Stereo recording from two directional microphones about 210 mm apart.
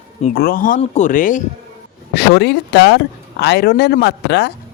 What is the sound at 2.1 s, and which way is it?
Speech, 50° left (ahead or behind).